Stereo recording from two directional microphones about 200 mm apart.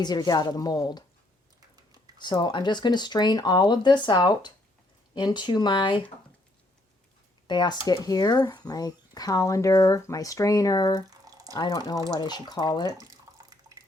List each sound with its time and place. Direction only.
0.0 s speech: 20° left (ahead or behind)
2.2 s speech: 20° left (ahead or behind)
7.4 s speech: 20° left (ahead or behind)
11.0 s drip: 20° right (ahead or behind)
11.5 s speech: 20° left (ahead or behind)